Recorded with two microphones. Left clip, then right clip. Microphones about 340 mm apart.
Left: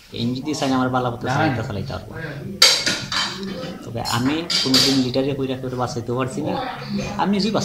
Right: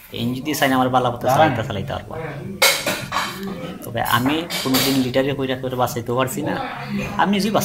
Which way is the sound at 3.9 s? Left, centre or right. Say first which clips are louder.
Right 4 dB; centre.